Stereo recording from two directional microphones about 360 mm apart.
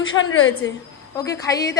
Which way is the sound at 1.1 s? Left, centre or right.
Centre.